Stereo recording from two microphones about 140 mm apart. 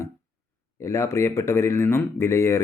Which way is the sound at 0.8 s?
20° left (ahead or behind).